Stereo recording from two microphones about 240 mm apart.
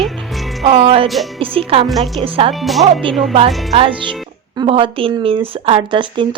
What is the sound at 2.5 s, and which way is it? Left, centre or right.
Speech, centre.